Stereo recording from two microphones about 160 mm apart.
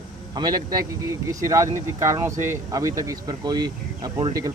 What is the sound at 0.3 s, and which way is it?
Speech, 25° right (ahead or behind).